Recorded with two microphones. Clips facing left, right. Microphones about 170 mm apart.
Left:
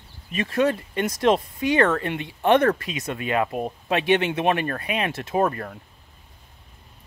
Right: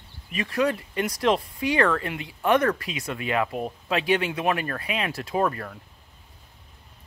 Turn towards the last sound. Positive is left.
turn(degrees=30)  # may be behind; listen again after turning